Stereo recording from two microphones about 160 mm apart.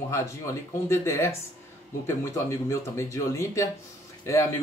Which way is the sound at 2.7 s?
15° left (ahead or behind).